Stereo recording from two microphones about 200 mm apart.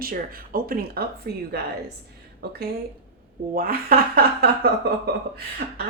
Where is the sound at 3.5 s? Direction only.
50° right (ahead or behind).